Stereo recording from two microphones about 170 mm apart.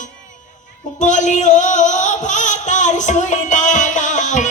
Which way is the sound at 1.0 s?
45° left (ahead or behind).